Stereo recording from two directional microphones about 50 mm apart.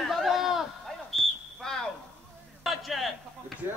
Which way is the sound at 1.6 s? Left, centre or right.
Centre.